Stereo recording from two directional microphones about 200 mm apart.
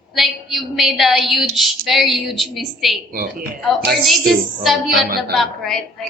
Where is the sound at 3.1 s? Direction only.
45° right (ahead or behind).